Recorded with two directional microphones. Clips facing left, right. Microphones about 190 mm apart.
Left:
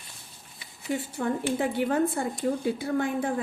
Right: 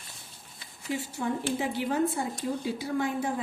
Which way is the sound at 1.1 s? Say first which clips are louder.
Left 2 dB; 50° left (ahead or behind).